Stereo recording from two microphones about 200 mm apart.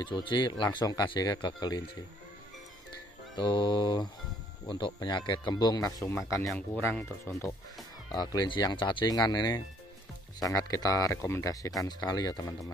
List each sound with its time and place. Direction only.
0.0 s speech: 25° left (ahead or behind)
3.3 s speech: 25° left (ahead or behind); by 7.3 s 5° left (ahead or behind)
8.1 s speech: 20° left (ahead or behind)